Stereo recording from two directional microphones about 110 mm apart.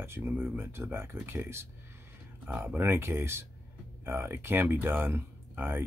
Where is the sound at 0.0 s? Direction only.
20° right (ahead or behind).